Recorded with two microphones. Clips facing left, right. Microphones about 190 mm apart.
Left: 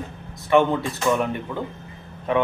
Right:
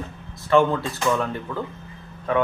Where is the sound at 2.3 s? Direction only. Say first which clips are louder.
Even; 20° left (ahead or behind).